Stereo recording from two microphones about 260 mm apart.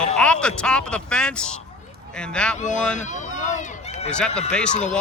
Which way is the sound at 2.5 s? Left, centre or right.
Left.